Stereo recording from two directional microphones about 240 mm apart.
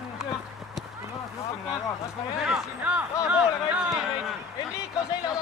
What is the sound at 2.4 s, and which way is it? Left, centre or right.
Speech, centre.